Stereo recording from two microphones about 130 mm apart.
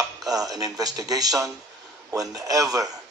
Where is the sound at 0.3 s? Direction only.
30° right (ahead or behind).